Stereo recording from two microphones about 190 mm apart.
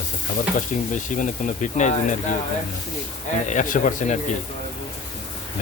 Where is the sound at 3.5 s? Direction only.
40° left (ahead or behind).